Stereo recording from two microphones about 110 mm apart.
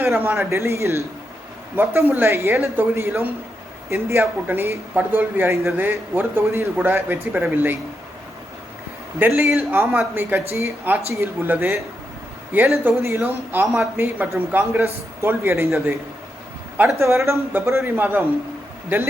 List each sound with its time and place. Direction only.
0.0 s speech: 15° right (ahead or behind)
9.1 s a man's voice: 15° right (ahead or behind)